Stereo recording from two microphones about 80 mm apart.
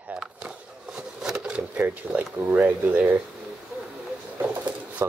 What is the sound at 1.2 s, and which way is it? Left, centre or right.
Speech, centre.